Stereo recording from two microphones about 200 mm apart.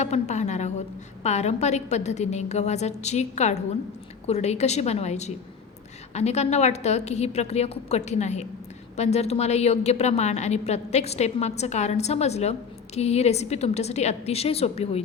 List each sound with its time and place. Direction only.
0.0 s a woman's voice: 35° left (ahead or behind)